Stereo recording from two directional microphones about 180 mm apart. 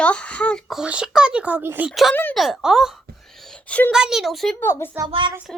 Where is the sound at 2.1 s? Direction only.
10° left (ahead or behind).